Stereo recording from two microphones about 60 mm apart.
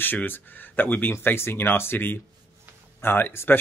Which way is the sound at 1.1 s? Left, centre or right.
Left.